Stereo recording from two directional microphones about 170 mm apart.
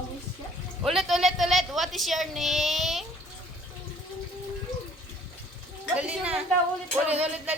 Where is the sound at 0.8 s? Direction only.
Centre (ahead or behind).